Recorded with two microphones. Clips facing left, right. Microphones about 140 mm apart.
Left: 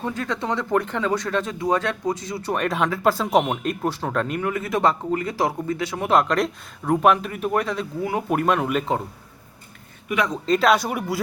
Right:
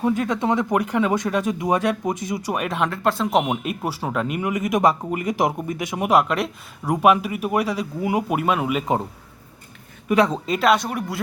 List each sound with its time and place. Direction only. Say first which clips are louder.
0.0 s speech: right 6 dB; 20° right (ahead or behind)
10.1 s speech: right 6 dB; 30° right (ahead or behind)
10.4 s speech: left 1 dB; 5° right (ahead or behind)